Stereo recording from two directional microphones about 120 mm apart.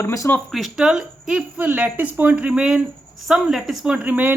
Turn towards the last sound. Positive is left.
turn(degrees=-10)  # may be behind; listen again after turning